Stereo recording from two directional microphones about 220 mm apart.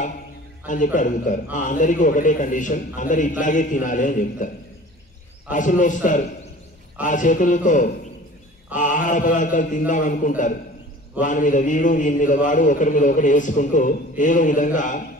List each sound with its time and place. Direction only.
0.7 s a man's voice: 35° left (ahead or behind)
5.5 s a man's voice: 35° left (ahead or behind)